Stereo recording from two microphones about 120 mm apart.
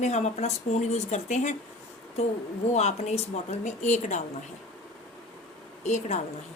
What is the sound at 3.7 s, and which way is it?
Speech, 85° left.